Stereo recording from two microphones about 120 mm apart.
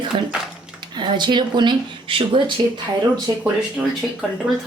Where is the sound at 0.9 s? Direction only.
40° right (ahead or behind).